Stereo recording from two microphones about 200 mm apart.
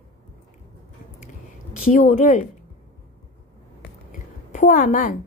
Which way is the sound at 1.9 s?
40° left (ahead or behind).